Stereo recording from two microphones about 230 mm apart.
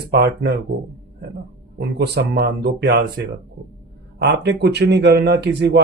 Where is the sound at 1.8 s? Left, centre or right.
Right.